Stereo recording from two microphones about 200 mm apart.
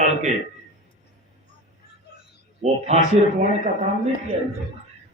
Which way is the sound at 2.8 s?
35° right (ahead or behind).